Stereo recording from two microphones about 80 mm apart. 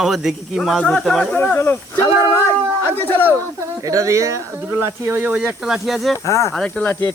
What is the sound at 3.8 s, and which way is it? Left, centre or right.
Speech, right.